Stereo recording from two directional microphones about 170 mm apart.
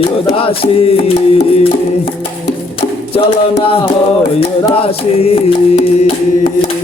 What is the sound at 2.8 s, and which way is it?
Music, 35° left (ahead or behind).